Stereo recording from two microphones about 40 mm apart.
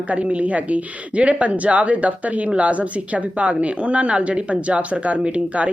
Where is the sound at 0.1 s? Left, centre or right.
Right.